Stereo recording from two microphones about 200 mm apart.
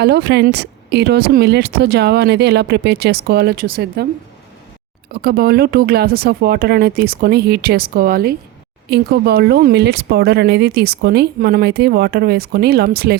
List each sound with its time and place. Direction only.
0.0 s speech: 55° right (ahead or behind)
5.1 s speech: 50° right (ahead or behind)